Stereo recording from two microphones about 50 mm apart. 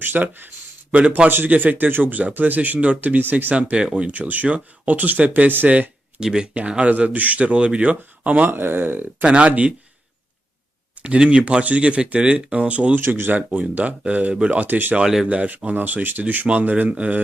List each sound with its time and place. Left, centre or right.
0.0 s speech: right
0.9 s speech: right
1.3 s speech: right
3.2 s speech: right
3.5 s speech: right
6.9 s speech: right
8.4 s speech: right
9.2 s speech: right
11.0 s speech: right
13.0 s speech: right
15.0 s speech: centre
15.3 s speech: right